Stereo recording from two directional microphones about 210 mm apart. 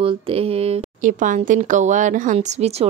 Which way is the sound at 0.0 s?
25° right (ahead or behind).